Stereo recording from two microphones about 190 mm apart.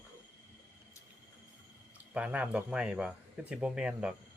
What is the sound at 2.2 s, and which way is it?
Speech, 5° right (ahead or behind).